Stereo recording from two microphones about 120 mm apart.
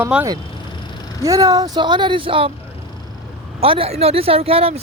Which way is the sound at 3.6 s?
50° right (ahead or behind).